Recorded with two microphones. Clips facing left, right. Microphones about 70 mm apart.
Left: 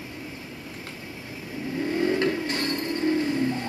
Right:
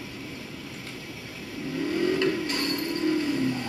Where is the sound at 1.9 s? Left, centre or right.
Left.